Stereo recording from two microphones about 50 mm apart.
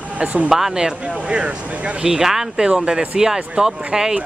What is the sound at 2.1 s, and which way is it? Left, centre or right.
Speech, centre.